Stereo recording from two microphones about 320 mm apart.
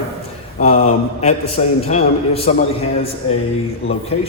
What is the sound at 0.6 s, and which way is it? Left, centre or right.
A man's voice, left.